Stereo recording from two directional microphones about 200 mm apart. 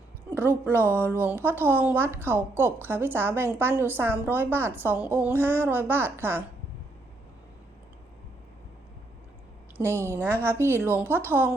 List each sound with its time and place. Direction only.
0.3 s a woman's voice: 10° right (ahead or behind)
9.7 s a woman's voice: 15° right (ahead or behind)